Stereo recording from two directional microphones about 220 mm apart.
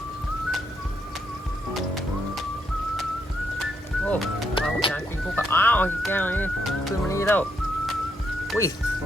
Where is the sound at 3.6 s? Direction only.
Centre (ahead or behind).